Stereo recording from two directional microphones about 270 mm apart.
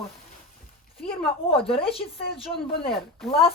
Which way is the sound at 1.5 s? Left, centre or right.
Left.